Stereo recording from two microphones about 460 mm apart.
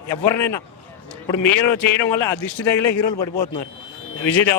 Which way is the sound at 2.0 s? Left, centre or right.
Left.